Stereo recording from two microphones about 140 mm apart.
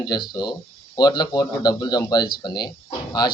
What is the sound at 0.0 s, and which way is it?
Speech, 30° left (ahead or behind).